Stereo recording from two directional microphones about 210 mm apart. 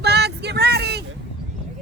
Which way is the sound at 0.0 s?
50° right (ahead or behind).